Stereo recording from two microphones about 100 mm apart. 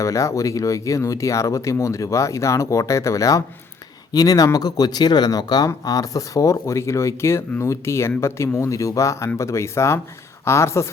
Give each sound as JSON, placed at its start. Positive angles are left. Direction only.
{"t": 0.0, "sound": "speech", "side_deg": 30}